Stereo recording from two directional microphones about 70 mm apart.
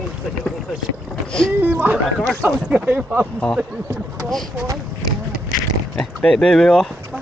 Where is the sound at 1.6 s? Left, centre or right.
Right.